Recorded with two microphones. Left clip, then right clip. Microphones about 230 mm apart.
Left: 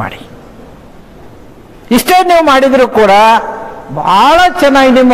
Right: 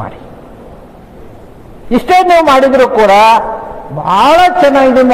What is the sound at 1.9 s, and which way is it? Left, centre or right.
A man's voice, left.